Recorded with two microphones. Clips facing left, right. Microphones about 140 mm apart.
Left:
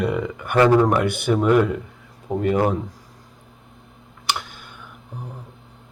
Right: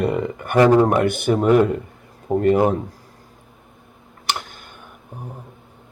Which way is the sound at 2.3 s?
5° right (ahead or behind).